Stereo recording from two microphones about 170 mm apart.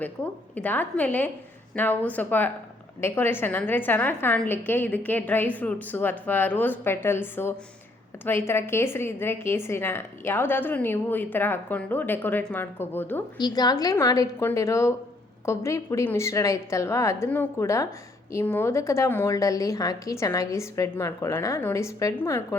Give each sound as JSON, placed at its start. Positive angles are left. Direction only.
{"t": 0.5, "sound": "a woman's voice", "side_deg": 10}
{"t": 13.4, "sound": "a woman's voice", "side_deg": 25}